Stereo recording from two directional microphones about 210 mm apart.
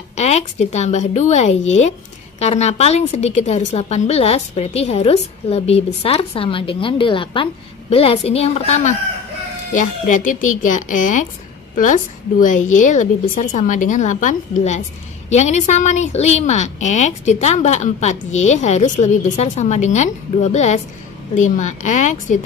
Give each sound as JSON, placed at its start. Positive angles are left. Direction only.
{"t": 0.1, "sound": "a woman's voice", "side_deg": 30}